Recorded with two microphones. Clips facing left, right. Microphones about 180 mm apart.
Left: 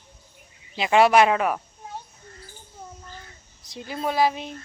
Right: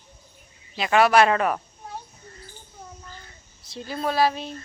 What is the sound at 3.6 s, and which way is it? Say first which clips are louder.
Speech: right 1 dB; 15° left (ahead or behind).